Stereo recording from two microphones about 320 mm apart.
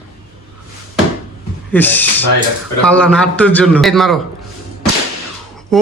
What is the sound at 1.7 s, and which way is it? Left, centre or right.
A man's voice, centre.